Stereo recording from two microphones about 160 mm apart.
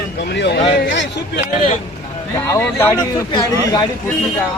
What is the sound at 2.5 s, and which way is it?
Speech, 15° left (ahead or behind).